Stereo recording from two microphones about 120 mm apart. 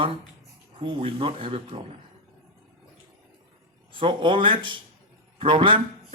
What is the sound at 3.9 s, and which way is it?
Speech, 45° right (ahead or behind).